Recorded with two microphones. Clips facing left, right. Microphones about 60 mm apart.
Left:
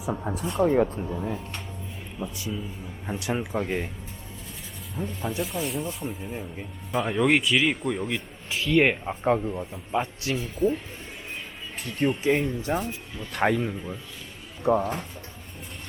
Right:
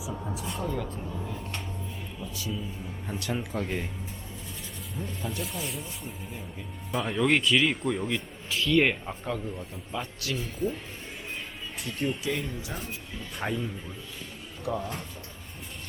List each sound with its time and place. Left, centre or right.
0.3 s speech: left
1.0 s speech: left
4.9 s speech: centre
8.4 s speech: centre
9.2 s speech: left
11.8 s speech: left
13.3 s a man's voice: left
14.6 s speech: left